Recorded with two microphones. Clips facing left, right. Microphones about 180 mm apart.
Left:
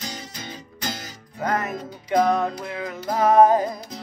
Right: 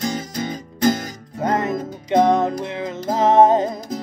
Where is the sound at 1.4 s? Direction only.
25° right (ahead or behind).